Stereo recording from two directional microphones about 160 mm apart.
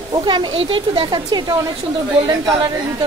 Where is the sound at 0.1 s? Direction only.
30° right (ahead or behind).